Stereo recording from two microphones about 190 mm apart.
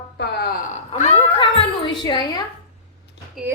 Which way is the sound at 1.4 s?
25° left (ahead or behind).